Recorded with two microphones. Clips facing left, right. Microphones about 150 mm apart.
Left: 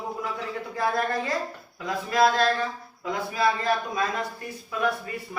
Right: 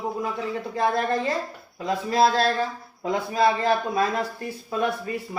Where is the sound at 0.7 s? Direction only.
25° right (ahead or behind).